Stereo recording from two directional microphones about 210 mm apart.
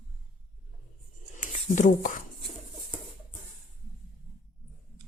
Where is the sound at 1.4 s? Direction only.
35° left (ahead or behind).